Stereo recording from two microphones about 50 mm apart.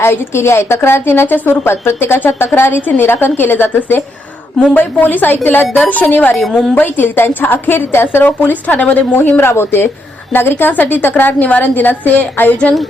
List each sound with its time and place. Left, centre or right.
0.0 s a woman's voice: left
2.8 s a woman's voice: left
6.5 s a woman's voice: centre
6.7 s a woman's voice: left
9.4 s a woman's voice: left